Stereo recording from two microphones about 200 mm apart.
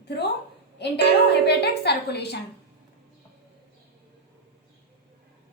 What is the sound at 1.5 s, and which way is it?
Speech, 55° left (ahead or behind).